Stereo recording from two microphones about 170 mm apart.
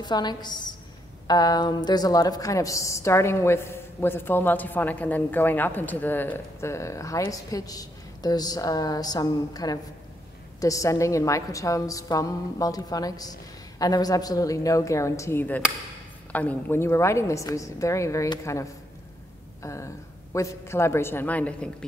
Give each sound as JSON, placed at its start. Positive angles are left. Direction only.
{"t": 0.0, "sound": "a woman's voice", "side_deg": 25}
{"t": 19.6, "sound": "a sound", "side_deg": 15}
{"t": 20.3, "sound": "a woman's voice", "side_deg": 15}